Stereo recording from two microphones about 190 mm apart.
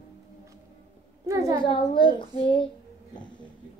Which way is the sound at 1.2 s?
20° right (ahead or behind).